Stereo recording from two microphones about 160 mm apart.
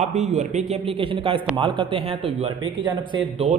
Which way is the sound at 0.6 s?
35° right (ahead or behind).